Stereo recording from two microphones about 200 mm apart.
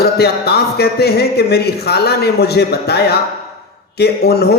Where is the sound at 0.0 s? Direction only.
55° left (ahead or behind).